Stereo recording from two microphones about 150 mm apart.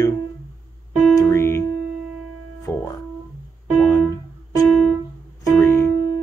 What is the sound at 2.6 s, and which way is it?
Speech, 20° left (ahead or behind).